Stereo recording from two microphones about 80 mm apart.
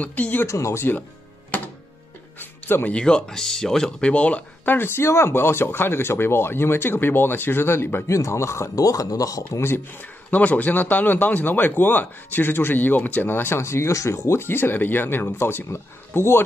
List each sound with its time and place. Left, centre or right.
0.0 s a man's voice: left
0.5 s speech: left
2.3 s music: left
3.0 s speech: centre
4.7 s a man's voice: left
10.3 s a man's voice: centre